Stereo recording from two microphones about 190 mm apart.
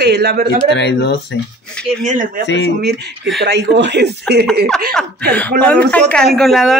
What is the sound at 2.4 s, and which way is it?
Speech, 65° left (ahead or behind).